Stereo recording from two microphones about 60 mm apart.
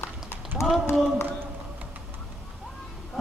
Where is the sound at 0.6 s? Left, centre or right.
Left.